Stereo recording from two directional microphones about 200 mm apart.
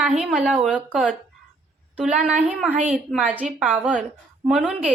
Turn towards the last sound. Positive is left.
turn(degrees=-5)  # may be behind; listen again after turning